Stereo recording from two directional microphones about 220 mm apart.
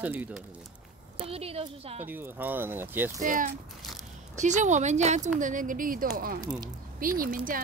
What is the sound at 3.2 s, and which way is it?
Speech, 35° right (ahead or behind).